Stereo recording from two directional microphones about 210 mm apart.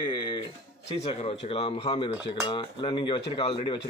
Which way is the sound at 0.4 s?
30° left (ahead or behind).